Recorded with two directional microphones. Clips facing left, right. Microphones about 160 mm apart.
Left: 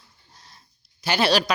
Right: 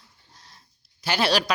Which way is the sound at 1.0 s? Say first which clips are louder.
Left 2 dB; centre (ahead or behind).